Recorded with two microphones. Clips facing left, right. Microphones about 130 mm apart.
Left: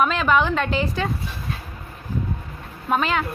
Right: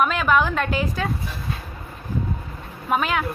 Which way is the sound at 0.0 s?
5° right (ahead or behind).